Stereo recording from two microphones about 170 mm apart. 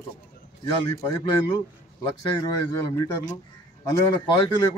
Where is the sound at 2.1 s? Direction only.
20° left (ahead or behind).